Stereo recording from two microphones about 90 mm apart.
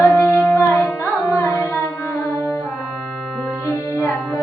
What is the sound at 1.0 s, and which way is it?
Carnatic music, 30° left (ahead or behind).